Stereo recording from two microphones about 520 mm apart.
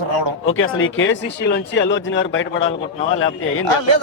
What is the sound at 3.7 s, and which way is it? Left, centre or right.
Speech, right.